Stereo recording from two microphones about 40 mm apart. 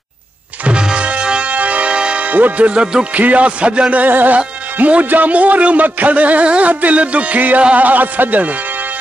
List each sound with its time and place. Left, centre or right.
0.7 s music: right
2.2 s speech: right
3.2 s speech: right
4.0 s speech: right